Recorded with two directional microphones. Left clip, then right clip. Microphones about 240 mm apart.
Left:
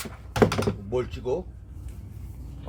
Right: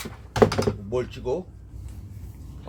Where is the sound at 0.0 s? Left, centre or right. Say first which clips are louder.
Right 3 dB; centre.